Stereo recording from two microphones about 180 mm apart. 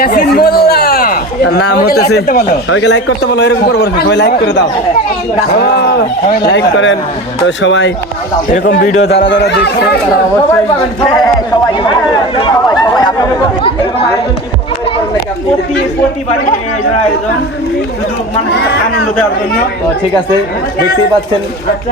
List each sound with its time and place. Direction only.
0.0 s speech: 55° left (ahead or behind)
2.7 s a man's voice: 75° left (ahead or behind)
6.5 s speech: 90° left
8.6 s a man's voice: 70° left (ahead or behind)
8.9 s a man's voice: 35° left (ahead or behind)
9.2 s a man's voice: 75° left (ahead or behind)
18.5 s a man's voice: 65° left (ahead or behind)